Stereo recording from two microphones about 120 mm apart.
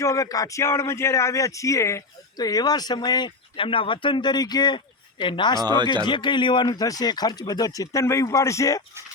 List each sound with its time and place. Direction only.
0.0 s speech: 25° left (ahead or behind)
5.6 s speech: 40° right (ahead or behind)
6.1 s speech: 40° left (ahead or behind); by 8.8 s 25° left (ahead or behind)